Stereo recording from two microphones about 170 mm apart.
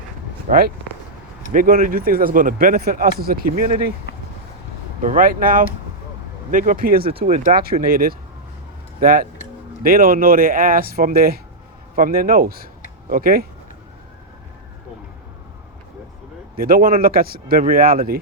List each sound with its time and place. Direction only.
0.4 s speech: 60° right (ahead or behind)
4.9 s speech: 55° right (ahead or behind)
7.0 s speech: 35° right (ahead or behind)
7.5 s speech: 60° right (ahead or behind)
16.6 s speech: 55° right (ahead or behind)